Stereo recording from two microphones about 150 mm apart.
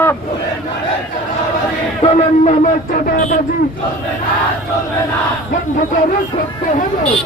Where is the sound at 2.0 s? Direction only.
45° left (ahead or behind).